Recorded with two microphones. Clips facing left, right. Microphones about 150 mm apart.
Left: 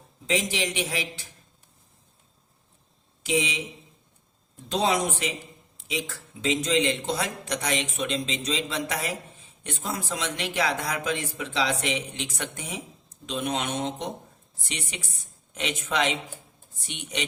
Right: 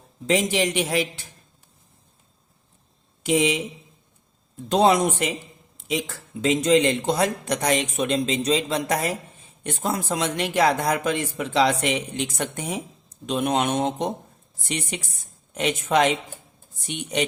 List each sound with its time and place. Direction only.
0.3 s a man's voice: 55° right (ahead or behind)
3.2 s a man's voice: 55° right (ahead or behind)
4.7 s a man's voice: 55° right (ahead or behind)